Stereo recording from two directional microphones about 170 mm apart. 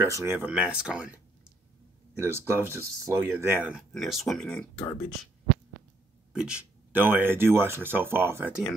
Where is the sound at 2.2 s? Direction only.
15° right (ahead or behind); by 4.7 s 5° left (ahead or behind).